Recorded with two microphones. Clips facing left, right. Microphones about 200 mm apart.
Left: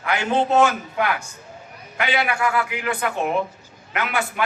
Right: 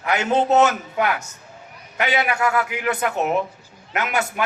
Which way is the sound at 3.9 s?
45° right (ahead or behind).